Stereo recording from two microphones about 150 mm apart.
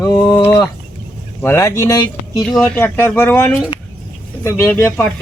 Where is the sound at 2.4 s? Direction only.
Centre (ahead or behind).